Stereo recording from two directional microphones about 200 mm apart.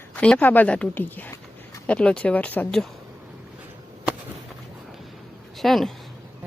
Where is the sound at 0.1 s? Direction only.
5° left (ahead or behind).